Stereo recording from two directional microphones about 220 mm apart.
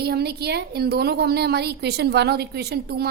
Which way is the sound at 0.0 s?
45° right (ahead or behind).